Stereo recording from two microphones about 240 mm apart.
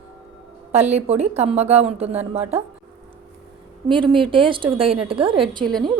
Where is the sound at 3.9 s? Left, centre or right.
Right.